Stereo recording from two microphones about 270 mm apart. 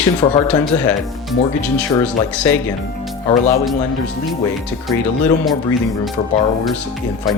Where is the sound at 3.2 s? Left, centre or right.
Left.